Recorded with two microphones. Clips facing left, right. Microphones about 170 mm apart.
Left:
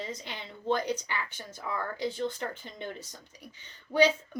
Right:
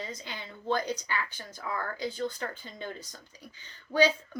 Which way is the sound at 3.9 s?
20° left (ahead or behind).